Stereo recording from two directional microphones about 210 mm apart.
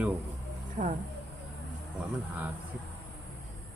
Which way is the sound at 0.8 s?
40° right (ahead or behind).